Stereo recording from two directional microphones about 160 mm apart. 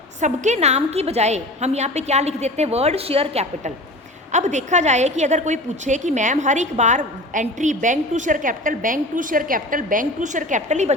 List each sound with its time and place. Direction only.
0.2 s a woman's voice: 50° right (ahead or behind)